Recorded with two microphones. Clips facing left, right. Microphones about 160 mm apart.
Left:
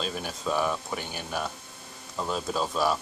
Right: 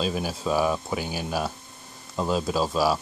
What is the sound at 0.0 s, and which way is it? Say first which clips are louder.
Speech: right 5 dB; 5° right (ahead or behind).